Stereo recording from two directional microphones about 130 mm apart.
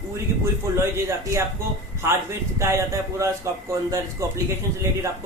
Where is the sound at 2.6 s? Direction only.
25° right (ahead or behind).